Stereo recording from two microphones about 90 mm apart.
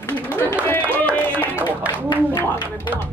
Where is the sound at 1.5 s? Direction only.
20° right (ahead or behind).